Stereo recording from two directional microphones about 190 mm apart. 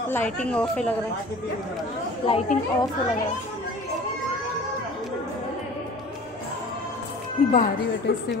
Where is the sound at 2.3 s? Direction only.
35° left (ahead or behind).